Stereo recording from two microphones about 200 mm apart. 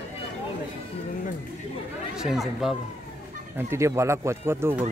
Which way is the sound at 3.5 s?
15° right (ahead or behind).